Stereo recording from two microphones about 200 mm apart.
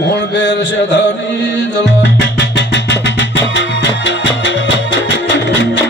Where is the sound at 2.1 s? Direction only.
60° left (ahead or behind).